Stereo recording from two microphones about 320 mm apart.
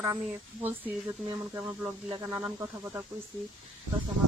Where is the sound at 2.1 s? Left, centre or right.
Centre.